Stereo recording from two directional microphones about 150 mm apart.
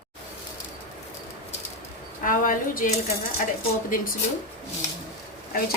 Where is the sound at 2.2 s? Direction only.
65° left (ahead or behind).